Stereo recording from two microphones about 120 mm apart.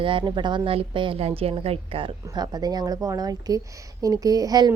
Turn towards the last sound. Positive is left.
turn(degrees=-30)  # may be behind; listen again after turning